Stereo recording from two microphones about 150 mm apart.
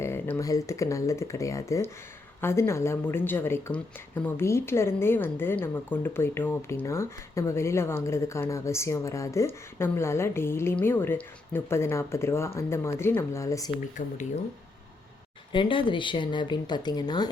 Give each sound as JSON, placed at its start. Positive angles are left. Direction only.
{"t": 0.0, "sound": "a woman's voice", "side_deg": 15}
{"t": 14.0, "sound": "speech", "side_deg": 60}
{"t": 15.5, "sound": "speech", "side_deg": 35}